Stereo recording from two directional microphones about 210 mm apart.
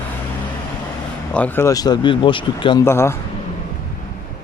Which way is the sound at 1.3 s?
10° left (ahead or behind).